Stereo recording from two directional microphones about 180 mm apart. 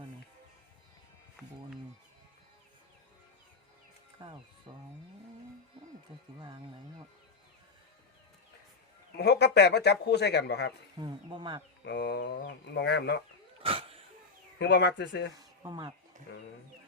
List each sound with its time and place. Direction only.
4.7 s speech: 30° right (ahead or behind)
9.1 s speech: 65° left (ahead or behind)
10.9 s speech: 25° right (ahead or behind)
11.8 s speech: 70° left (ahead or behind)
13.6 s a sound: 30° right (ahead or behind)
14.6 s speech: 70° left (ahead or behind)
15.4 s a sound: 25° right (ahead or behind)
16.1 s speech: 45° right (ahead or behind)